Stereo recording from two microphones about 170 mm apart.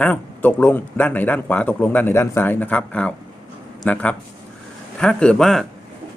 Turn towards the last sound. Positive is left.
turn(degrees=5)  # may be behind; listen again after turning